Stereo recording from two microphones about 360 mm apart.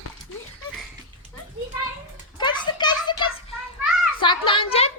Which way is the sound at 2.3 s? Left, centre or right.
Centre.